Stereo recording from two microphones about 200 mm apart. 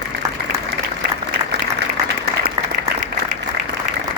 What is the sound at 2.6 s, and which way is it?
Applause, 25° right (ahead or behind).